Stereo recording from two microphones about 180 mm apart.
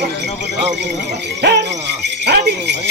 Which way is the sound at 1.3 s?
70° right (ahead or behind).